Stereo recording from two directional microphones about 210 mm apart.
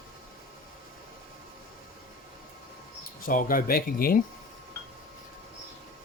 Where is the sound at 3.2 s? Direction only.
40° left (ahead or behind).